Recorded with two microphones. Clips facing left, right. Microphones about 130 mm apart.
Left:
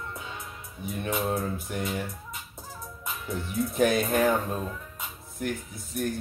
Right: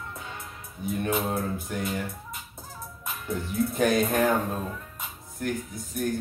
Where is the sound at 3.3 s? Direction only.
Centre (ahead or behind).